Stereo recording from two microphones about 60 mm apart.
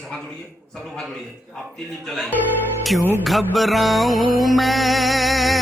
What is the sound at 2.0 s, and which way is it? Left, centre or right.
Music, centre.